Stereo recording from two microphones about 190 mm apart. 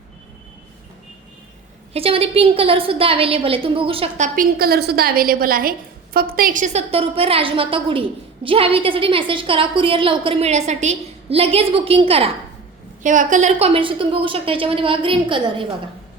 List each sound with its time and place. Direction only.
1.9 s a woman's voice: 30° right (ahead or behind)
4.4 s a woman's voice: 50° right (ahead or behind); by 12.3 s 30° right (ahead or behind)
13.0 s a woman's voice: 40° right (ahead or behind)
13.7 s a woman's voice: 25° right (ahead or behind)